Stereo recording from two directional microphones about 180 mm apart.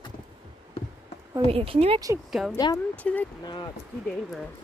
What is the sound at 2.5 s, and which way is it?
Speech, 20° left (ahead or behind).